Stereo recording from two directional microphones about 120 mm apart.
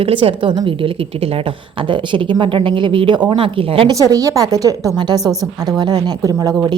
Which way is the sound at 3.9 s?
30° right (ahead or behind).